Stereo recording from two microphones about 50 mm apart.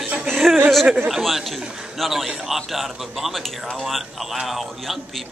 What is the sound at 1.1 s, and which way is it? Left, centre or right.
Speech, centre.